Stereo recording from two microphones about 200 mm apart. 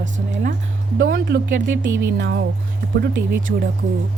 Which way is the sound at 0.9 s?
50° right (ahead or behind).